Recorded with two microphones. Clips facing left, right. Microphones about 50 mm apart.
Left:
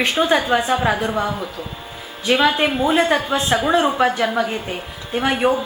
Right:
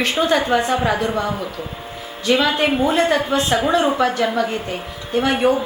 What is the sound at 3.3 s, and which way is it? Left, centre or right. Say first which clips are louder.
A woman's voice: even; centre.